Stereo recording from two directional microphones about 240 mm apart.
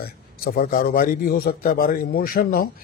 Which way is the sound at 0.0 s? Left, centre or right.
Left.